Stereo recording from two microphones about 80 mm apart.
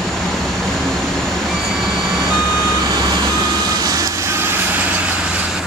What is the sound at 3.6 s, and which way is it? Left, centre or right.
Vehicle, right.